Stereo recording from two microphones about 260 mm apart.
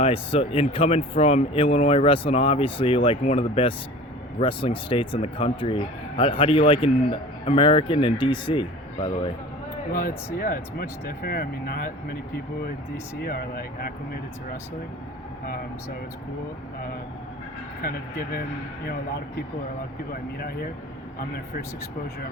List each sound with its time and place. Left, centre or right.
0.0 s speech: left
9.9 s speech: left
13.1 s speech: left
17.8 s speech: left